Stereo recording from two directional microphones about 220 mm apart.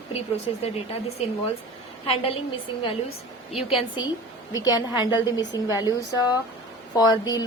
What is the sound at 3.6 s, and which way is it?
A woman's voice, 25° left (ahead or behind).